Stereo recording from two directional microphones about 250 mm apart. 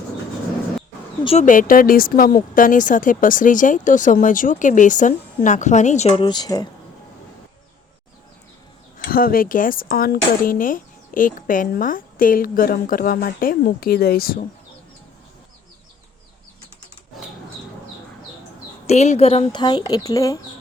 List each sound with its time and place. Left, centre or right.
1.2 s speech: left
9.0 s speech: left
18.9 s speech: left